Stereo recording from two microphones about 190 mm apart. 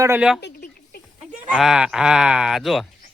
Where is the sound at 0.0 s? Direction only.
10° right (ahead or behind).